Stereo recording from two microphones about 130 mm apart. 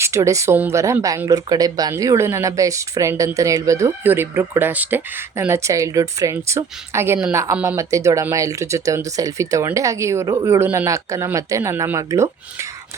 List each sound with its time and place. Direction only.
0.0 s speech: 20° right (ahead or behind)